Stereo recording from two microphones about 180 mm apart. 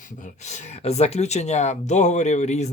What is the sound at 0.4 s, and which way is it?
Speech, 40° left (ahead or behind).